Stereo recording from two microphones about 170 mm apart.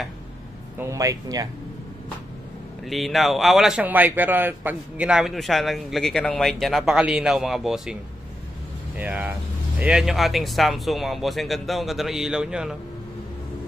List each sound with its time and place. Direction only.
0.7 s speech: 20° right (ahead or behind)
2.8 s speech: centre (ahead or behind)